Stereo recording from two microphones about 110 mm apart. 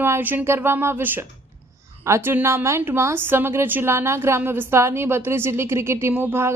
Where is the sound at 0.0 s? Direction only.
20° right (ahead or behind).